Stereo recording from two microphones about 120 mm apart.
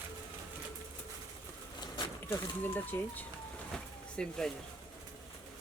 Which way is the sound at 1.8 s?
35° left (ahead or behind).